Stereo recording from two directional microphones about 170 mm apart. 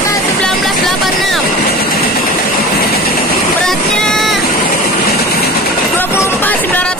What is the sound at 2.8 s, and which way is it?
Vehicle, 60° left (ahead or behind).